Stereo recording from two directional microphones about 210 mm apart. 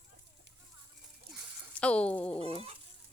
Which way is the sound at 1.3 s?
5° left (ahead or behind).